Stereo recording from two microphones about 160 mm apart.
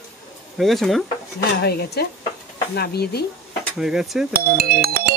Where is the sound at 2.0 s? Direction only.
90° left.